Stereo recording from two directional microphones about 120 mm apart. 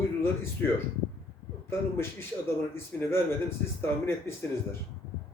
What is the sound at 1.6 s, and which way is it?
Speech, 20° left (ahead or behind).